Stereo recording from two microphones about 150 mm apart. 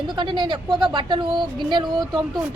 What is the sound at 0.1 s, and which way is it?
A woman's voice, 30° right (ahead or behind).